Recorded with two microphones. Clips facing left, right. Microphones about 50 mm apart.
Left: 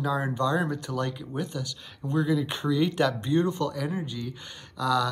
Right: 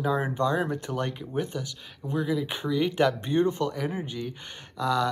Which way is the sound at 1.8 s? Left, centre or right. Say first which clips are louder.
Left 3 dB; centre.